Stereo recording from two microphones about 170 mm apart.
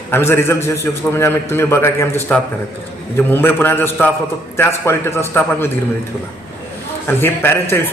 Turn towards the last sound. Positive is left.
turn(degrees=15)  # may be behind; listen again after turning